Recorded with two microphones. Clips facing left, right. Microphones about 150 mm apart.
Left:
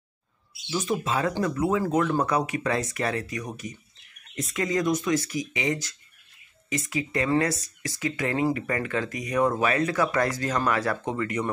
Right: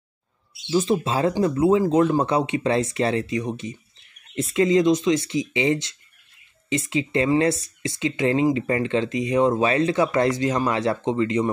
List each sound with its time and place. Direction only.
0.7 s speech: 30° right (ahead or behind)